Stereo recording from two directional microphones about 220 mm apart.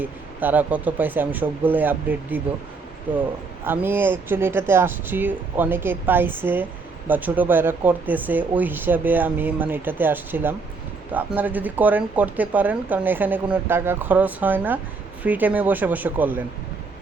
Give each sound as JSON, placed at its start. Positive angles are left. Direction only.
{"t": 0.0, "sound": "speech", "side_deg": -10}
{"t": 3.7, "sound": "speech", "side_deg": -10}